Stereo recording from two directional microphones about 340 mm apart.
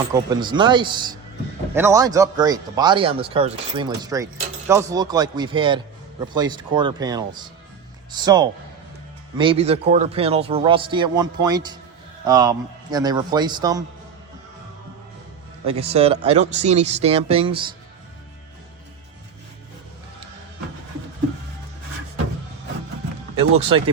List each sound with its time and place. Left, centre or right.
0.1 s a man's voice: centre
15.8 s a man's voice: centre
23.6 s a man's voice: centre